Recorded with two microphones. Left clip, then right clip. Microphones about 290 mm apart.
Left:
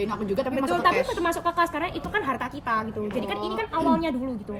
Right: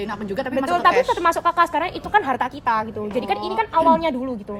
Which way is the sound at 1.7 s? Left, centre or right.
Right.